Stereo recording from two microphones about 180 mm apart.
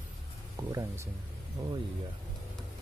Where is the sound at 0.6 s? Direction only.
20° right (ahead or behind).